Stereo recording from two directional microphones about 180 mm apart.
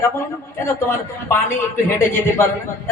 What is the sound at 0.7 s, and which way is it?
A man's voice, 15° left (ahead or behind).